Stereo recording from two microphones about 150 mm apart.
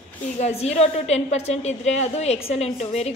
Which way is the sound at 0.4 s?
45° left (ahead or behind).